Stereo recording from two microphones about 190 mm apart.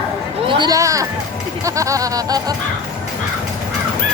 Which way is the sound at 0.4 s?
25° right (ahead or behind).